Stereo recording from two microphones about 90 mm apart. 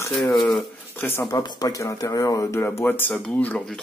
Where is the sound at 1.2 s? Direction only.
50° left (ahead or behind); by 2.7 s 35° left (ahead or behind).